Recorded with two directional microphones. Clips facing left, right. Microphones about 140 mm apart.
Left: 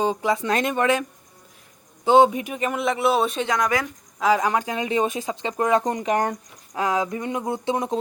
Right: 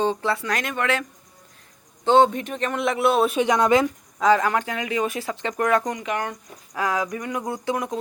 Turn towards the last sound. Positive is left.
turn(degrees=25)  # may be behind; listen again after turning